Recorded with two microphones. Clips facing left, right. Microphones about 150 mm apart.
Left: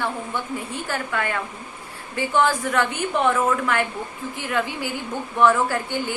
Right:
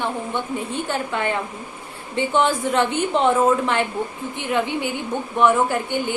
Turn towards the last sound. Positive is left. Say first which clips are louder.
# right 2 dB
turn(degrees=-20)  # may be behind; listen again after turning